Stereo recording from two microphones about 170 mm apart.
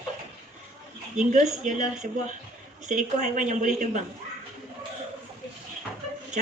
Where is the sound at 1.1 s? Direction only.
45° right (ahead or behind).